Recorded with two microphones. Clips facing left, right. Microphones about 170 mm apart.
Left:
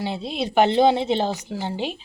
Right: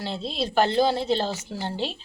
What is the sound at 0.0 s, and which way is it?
Speech, 15° left (ahead or behind).